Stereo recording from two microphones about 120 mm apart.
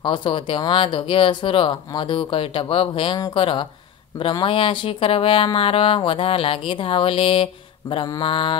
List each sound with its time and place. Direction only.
0.0 s speech: 45° left (ahead or behind)